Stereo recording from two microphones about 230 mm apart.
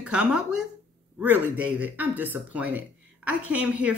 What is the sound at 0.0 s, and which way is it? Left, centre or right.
Speech, centre.